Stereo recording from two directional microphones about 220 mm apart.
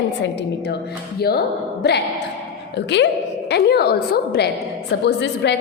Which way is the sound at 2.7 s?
50° left (ahead or behind).